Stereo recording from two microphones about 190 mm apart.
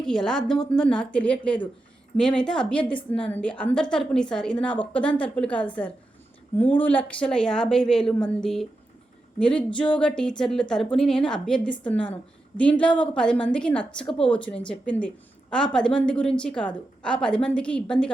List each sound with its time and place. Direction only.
0.0 s a woman's voice: 5° left (ahead or behind)